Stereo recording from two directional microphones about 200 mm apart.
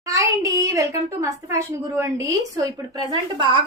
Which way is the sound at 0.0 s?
15° right (ahead or behind).